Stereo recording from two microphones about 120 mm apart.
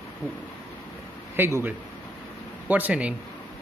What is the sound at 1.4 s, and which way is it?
A man's voice, 20° right (ahead or behind).